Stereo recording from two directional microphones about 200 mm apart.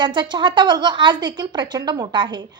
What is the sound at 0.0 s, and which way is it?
A woman's voice, 25° right (ahead or behind).